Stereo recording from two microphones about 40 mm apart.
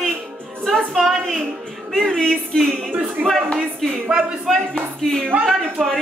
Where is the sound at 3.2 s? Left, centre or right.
Right.